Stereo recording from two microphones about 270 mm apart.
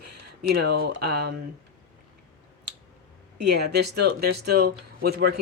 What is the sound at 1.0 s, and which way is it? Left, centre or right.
Speech, right.